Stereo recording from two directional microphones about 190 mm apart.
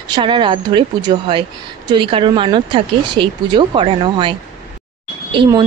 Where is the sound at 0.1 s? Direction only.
25° right (ahead or behind).